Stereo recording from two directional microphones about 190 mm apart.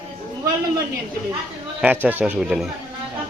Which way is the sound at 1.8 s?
10° right (ahead or behind).